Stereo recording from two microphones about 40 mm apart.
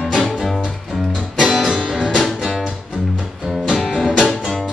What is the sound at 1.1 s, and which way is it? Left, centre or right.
Music, centre.